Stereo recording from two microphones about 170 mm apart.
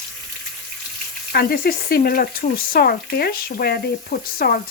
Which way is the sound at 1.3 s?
65° left (ahead or behind).